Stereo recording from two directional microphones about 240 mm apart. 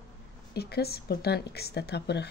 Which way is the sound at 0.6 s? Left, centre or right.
Left.